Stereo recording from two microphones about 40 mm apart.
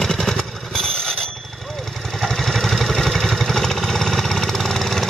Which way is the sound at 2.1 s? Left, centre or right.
Centre.